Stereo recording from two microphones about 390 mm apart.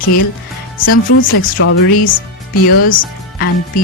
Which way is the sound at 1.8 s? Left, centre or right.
Left.